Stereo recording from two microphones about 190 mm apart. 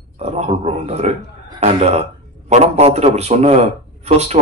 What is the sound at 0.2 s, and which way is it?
Speech, 35° right (ahead or behind).